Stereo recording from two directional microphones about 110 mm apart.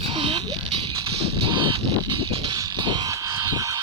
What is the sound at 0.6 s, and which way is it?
Music, 65° right (ahead or behind).